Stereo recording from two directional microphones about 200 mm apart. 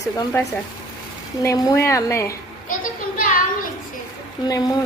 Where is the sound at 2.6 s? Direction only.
40° left (ahead or behind).